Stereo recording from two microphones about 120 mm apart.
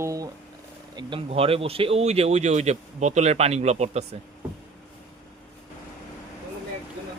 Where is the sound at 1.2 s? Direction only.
55° right (ahead or behind).